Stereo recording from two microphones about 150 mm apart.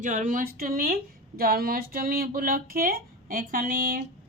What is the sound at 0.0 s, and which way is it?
Speech, 55° right (ahead or behind).